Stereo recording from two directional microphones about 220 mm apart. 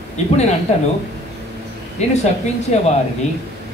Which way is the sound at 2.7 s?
30° left (ahead or behind).